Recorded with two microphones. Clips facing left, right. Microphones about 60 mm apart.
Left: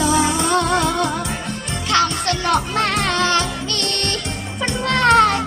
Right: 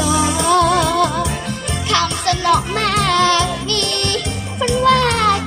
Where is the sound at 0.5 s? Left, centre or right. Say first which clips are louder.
Right 6 dB; left.